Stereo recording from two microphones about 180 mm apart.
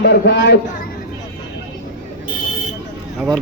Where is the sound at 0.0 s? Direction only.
70° left (ahead or behind).